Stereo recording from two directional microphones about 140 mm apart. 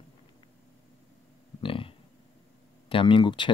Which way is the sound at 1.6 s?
40° left (ahead or behind).